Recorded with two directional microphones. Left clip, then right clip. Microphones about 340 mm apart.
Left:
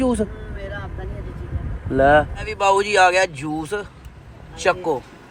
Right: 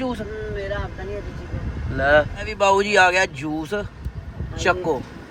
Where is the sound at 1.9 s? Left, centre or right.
Centre.